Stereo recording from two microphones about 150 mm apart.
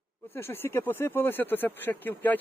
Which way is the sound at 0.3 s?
15° left (ahead or behind).